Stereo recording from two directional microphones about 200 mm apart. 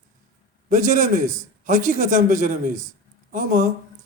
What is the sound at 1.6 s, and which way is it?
A man's voice, 40° right (ahead or behind).